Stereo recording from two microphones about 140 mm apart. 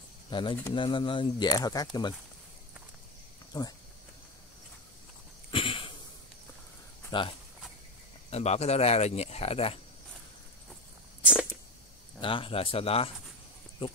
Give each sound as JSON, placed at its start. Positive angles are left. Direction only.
{"t": 0.3, "sound": "speech", "side_deg": 35}
{"t": 3.5, "sound": "speech", "side_deg": 25}
{"t": 5.5, "sound": "a sound", "side_deg": 40}
{"t": 7.1, "sound": "speech", "side_deg": 35}
{"t": 8.3, "sound": "speech", "side_deg": 50}
{"t": 12.2, "sound": "speech", "side_deg": 40}